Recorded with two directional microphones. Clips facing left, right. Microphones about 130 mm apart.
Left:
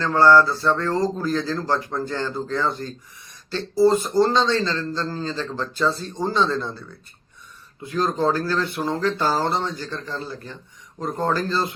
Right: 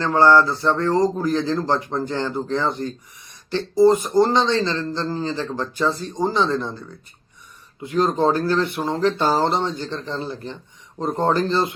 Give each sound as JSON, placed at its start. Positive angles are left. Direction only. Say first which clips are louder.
{"t": 0.0, "sound": "a man's voice", "louder": "even", "side_deg": -15}